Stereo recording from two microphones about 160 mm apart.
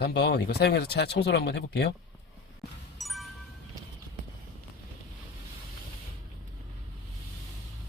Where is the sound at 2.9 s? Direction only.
Centre (ahead or behind).